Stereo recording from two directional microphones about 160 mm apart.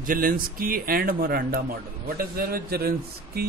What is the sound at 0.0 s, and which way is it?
A man's voice, 60° right (ahead or behind).